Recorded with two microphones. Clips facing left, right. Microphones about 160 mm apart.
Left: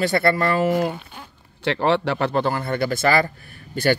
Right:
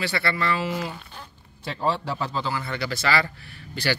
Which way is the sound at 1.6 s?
75° left (ahead or behind).